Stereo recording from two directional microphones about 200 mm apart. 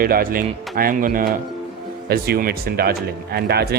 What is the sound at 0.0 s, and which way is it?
Speech, 45° right (ahead or behind).